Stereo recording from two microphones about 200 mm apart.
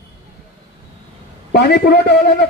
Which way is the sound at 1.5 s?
55° left (ahead or behind).